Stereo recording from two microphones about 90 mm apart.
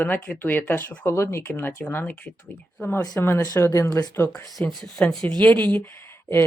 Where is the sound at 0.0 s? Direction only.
20° left (ahead or behind).